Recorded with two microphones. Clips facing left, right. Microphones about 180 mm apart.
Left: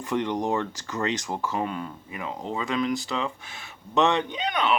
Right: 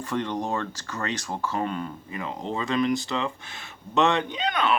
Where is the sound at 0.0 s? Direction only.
15° left (ahead or behind).